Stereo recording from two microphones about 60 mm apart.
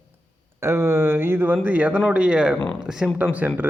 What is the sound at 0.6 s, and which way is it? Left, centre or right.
Speech, right.